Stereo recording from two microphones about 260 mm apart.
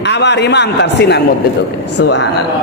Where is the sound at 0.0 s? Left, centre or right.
Left.